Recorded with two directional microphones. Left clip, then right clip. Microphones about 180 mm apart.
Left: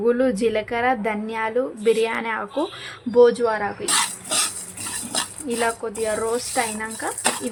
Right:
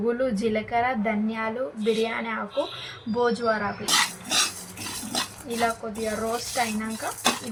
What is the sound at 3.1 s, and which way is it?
Speech, 50° left (ahead or behind).